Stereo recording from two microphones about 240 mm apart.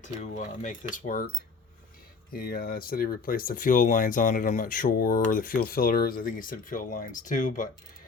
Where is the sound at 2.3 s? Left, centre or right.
Left.